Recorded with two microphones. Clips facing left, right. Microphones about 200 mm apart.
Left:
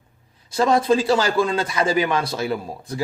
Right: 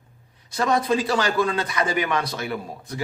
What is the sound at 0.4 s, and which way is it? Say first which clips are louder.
A man's voice: left 4 dB; 30° left (ahead or behind).